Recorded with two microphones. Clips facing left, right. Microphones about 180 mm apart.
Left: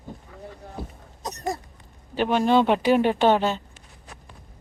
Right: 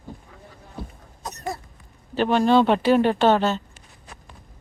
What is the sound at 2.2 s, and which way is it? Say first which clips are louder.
Speech: right 2 dB; 15° left (ahead or behind).